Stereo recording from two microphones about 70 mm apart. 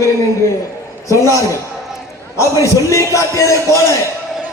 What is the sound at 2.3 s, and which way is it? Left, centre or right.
A man's voice, left.